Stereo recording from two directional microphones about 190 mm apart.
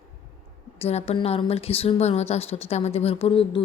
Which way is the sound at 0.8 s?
35° left (ahead or behind).